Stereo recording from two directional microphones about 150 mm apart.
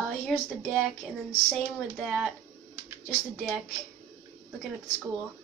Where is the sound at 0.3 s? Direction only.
5° left (ahead or behind).